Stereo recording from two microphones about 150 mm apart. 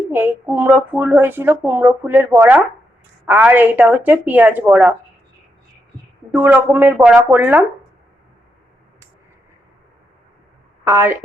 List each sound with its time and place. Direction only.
0.1 s a woman's voice: 15° right (ahead or behind)
6.3 s a woman's voice: 10° right (ahead or behind)
10.8 s a woman's voice: 15° right (ahead or behind)